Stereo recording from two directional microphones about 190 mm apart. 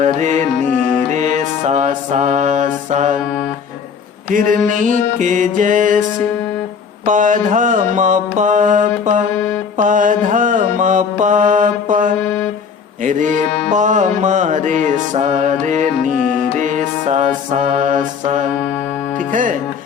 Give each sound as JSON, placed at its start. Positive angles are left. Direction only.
{"t": 0.0, "sound": "music", "side_deg": -40}
{"t": 4.3, "sound": "music", "side_deg": -45}
{"t": 7.0, "sound": "music", "side_deg": -40}
{"t": 9.7, "sound": "mantra", "side_deg": -45}
{"t": 12.2, "sound": "music", "side_deg": 5}
{"t": 13.1, "sound": "music", "side_deg": -40}
{"t": 16.1, "sound": "music", "side_deg": 0}
{"t": 16.6, "sound": "music", "side_deg": -40}
{"t": 19.3, "sound": "speech", "side_deg": -45}